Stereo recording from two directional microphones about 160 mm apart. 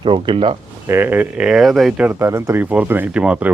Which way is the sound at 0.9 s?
15° right (ahead or behind).